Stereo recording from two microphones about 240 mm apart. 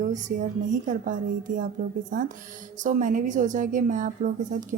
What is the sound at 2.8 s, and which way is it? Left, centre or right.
A woman's voice, right.